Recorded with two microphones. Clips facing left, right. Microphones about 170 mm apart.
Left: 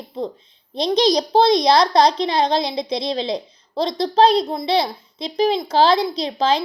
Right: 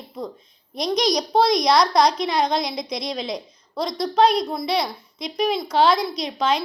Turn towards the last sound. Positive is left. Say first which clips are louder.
# left 3 dB
turn(degrees=30)  # may be behind; listen again after turning